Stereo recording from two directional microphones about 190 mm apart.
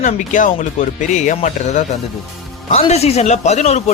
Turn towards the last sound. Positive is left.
turn(degrees=35)  # may be behind; listen again after turning